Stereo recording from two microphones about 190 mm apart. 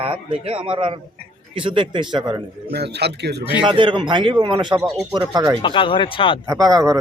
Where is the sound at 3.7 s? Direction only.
25° right (ahead or behind).